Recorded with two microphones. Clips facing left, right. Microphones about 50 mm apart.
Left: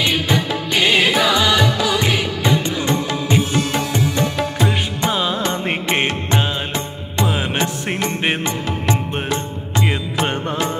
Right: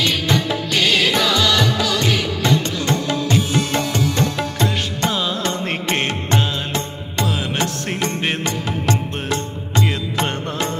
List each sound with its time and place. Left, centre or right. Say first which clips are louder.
0.0 s music: left 1 dB; centre
4.6 s music: left 1 dB; centre